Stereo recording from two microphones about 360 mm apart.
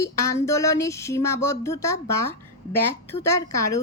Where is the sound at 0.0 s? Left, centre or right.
Centre.